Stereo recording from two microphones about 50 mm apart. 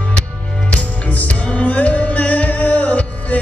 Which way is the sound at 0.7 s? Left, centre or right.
Left.